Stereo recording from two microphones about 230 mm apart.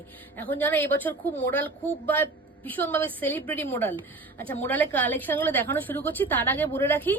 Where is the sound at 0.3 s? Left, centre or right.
Centre.